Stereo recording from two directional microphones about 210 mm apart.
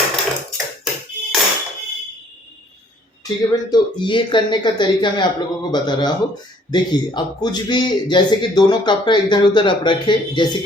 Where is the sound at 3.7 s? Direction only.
20° left (ahead or behind).